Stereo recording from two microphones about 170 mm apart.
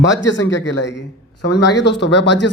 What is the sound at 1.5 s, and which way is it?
Speech, 90° left.